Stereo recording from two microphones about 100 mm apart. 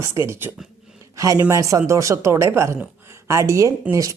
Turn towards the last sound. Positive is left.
turn(degrees=-30)  # may be behind; listen again after turning